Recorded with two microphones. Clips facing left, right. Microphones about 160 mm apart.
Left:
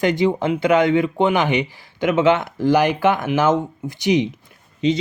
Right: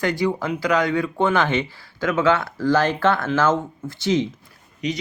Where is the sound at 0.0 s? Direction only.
20° left (ahead or behind).